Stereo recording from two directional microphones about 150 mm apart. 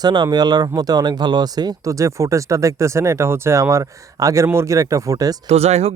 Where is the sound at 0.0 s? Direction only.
30° right (ahead or behind).